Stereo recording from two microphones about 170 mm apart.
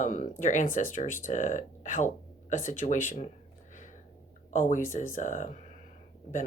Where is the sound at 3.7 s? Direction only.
45° left (ahead or behind).